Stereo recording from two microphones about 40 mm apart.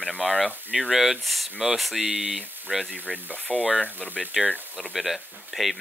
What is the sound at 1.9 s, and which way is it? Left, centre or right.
Speech, right.